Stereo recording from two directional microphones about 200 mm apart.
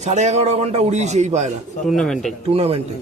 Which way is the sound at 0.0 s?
35° right (ahead or behind).